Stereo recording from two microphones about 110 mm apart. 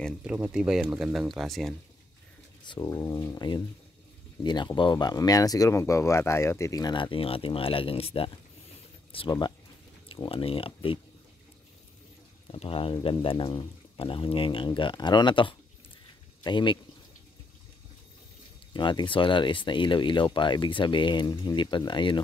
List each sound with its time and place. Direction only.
0.2 s speech: 10° right (ahead or behind)
2.8 s speech: 30° left (ahead or behind); by 8.3 s 60° left (ahead or behind)
10.0 s speech: 50° left (ahead or behind)
12.4 s speech: 55° left (ahead or behind)
18.7 s speech: 45° left (ahead or behind)